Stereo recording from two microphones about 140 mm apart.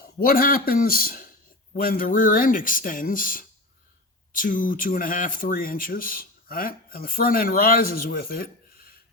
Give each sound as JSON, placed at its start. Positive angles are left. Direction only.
{"t": 0.0, "sound": "speech", "side_deg": 90}